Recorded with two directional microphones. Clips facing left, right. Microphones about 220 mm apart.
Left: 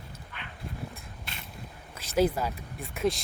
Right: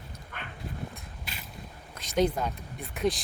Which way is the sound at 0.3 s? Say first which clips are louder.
Right 4 dB; 50° right (ahead or behind).